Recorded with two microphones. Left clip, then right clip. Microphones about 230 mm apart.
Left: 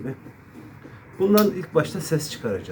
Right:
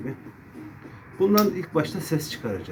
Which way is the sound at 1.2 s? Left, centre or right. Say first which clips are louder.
Left 2 dB; centre.